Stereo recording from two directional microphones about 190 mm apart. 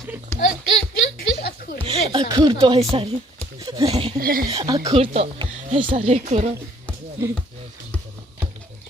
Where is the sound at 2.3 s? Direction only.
25° right (ahead or behind).